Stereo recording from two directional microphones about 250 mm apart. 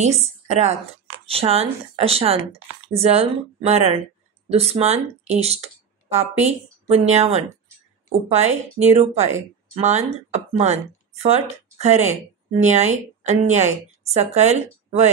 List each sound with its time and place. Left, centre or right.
0.0 s a woman's voice: right